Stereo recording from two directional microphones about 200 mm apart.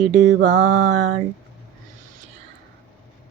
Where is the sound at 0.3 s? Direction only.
65° right (ahead or behind).